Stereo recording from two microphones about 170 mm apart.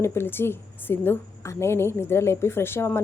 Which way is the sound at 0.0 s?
15° left (ahead or behind).